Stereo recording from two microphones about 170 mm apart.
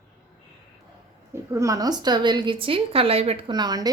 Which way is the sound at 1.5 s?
20° right (ahead or behind).